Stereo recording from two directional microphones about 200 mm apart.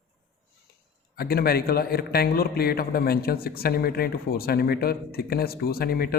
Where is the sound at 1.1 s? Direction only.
50° left (ahead or behind).